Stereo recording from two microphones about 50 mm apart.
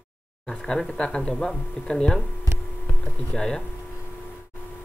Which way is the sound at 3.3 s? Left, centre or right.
Centre.